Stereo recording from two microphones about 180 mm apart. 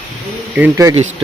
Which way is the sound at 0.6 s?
15° right (ahead or behind).